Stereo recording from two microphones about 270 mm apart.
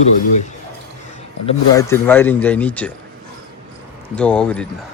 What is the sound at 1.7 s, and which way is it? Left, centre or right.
Speech, centre.